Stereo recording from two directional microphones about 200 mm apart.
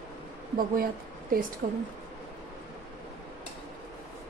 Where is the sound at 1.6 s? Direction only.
40° right (ahead or behind).